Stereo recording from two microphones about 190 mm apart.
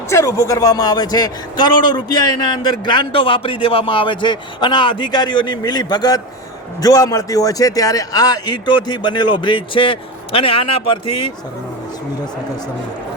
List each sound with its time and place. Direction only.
0.1 s a man's voice: 15° left (ahead or behind)